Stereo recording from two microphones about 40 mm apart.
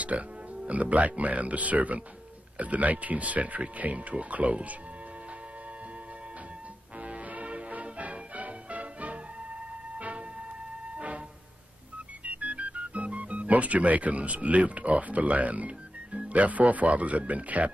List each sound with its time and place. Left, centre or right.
0.1 s speech: right
7.1 s music: right
12.3 s music: right
16.4 s speech: right